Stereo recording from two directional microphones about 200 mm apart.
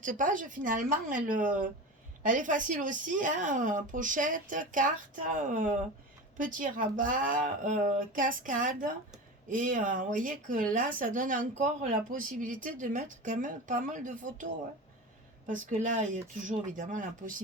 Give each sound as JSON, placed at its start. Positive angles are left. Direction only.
{"t": 0.0, "sound": "speech", "side_deg": -40}